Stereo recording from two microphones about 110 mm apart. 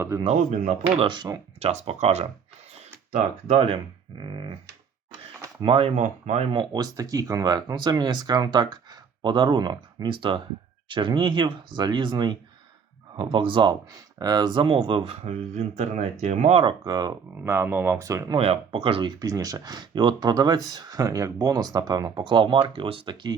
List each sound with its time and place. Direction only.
0.9 s speech: 45° right (ahead or behind)
1.5 s speech: 70° right (ahead or behind)
3.4 s speech: 60° right (ahead or behind)
5.6 s speech: 55° right (ahead or behind)
6.0 s speech: 80° right
6.5 s speech: 40° right (ahead or behind)
14.2 s speech: 35° right (ahead or behind)
15.1 s speech: 80° right
16.6 s speech: 35° right (ahead or behind)
17.3 s speech: 25° right (ahead or behind)
18.3 s speech: 60° right (ahead or behind)
19.2 s speech: 35° right (ahead or behind); by 23.3 s 50° right (ahead or behind)